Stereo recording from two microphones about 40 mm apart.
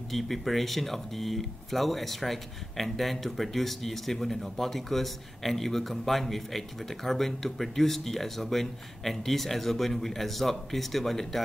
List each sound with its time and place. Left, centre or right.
0.1 s speech: centre